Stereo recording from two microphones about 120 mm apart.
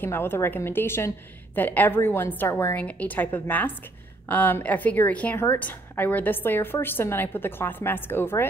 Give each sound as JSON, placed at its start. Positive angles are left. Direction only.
{"t": 0.0, "sound": "a woman's voice", "side_deg": 20}